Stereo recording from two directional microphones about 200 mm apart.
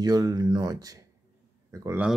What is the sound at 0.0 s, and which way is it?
A man's voice, 20° right (ahead or behind).